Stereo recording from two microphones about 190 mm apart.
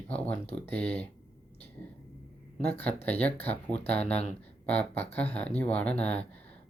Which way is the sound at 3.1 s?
10° left (ahead or behind).